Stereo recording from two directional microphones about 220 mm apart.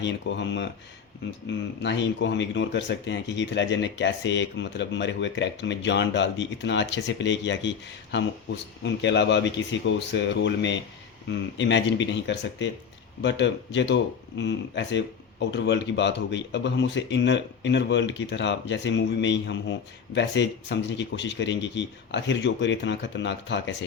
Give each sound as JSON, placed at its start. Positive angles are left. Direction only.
{"t": 0.0, "sound": "speech", "side_deg": 55}
{"t": 1.8, "sound": "speech", "side_deg": 55}
{"t": 8.8, "sound": "speech", "side_deg": 55}